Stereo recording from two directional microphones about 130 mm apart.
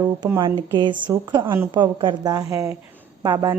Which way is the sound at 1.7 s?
35° right (ahead or behind).